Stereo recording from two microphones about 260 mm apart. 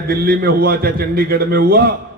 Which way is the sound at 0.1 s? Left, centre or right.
Right.